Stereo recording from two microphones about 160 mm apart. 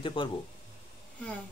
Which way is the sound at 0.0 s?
30° left (ahead or behind).